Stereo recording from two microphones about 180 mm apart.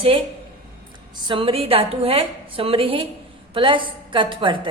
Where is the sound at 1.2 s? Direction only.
30° right (ahead or behind).